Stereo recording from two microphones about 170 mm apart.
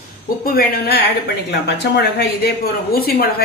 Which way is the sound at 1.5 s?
85° left.